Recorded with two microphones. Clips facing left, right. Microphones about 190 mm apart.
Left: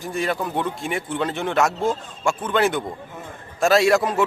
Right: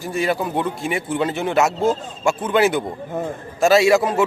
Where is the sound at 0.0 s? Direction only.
5° right (ahead or behind).